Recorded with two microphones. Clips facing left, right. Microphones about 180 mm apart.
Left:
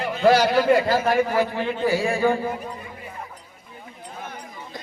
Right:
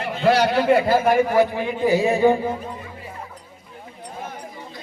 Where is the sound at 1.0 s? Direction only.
15° right (ahead or behind).